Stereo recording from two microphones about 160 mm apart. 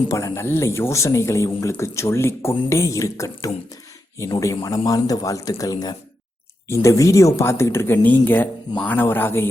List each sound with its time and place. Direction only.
0.1 s speech: 15° left (ahead or behind)